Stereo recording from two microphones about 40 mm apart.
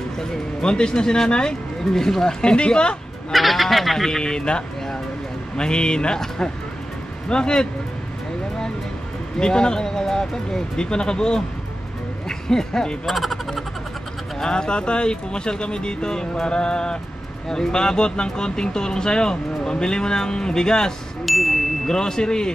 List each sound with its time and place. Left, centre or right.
0.2 s speech: left
3.3 s speech: centre
4.2 s speech: left
9.4 s speech: left
13.0 s speech: centre
14.4 s speech: centre
21.3 s ding: centre
21.8 s speech: centre